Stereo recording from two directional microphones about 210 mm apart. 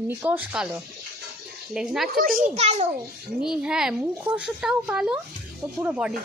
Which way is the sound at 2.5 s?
30° right (ahead or behind).